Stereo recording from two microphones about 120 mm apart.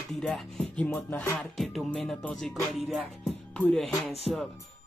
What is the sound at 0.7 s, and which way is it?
Music, 15° left (ahead or behind).